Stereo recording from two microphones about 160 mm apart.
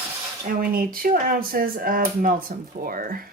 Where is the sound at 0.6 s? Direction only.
65° right (ahead or behind).